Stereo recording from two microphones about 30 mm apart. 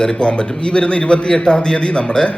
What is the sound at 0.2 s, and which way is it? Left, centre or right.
A man's voice, left.